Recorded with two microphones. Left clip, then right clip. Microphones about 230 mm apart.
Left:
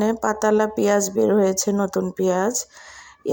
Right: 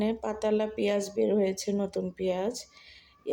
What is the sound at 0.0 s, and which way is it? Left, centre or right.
Speech, left.